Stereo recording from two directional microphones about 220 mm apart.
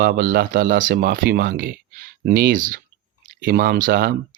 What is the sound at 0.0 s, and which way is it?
Speech, 40° right (ahead or behind).